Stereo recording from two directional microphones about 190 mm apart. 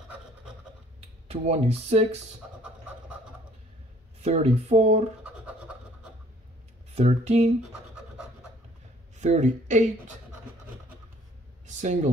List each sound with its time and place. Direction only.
1.3 s speech: 35° right (ahead or behind)
4.2 s speech: 35° right (ahead or behind)
7.0 s speech: 35° right (ahead or behind)
9.2 s speech: 40° right (ahead or behind)
11.6 s a sound: 40° right (ahead or behind)